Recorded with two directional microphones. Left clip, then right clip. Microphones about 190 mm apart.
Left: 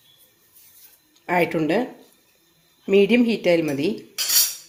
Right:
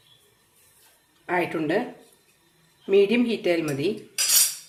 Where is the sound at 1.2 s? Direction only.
40° left (ahead or behind).